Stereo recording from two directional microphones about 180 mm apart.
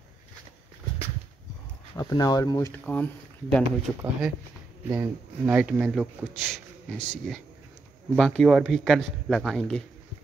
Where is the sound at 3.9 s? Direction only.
5° right (ahead or behind).